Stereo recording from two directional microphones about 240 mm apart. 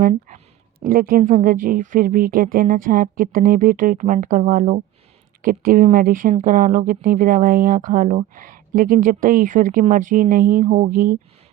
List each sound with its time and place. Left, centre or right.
0.0 s speech: right